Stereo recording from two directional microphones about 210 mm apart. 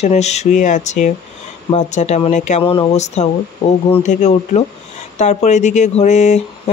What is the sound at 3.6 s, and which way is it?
Speech, 30° left (ahead or behind).